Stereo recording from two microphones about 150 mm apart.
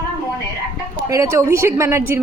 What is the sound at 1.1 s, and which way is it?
A woman's voice, 20° right (ahead or behind).